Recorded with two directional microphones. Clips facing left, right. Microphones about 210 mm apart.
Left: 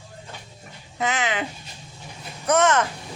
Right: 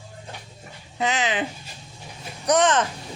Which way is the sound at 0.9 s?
20° right (ahead or behind).